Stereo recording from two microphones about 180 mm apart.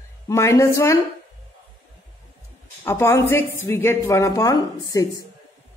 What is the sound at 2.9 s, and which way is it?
A man's voice, 15° left (ahead or behind).